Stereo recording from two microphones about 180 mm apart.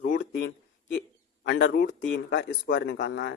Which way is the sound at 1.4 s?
65° left (ahead or behind).